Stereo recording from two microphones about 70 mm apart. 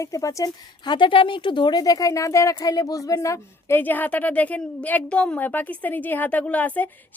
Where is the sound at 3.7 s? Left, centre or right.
Left.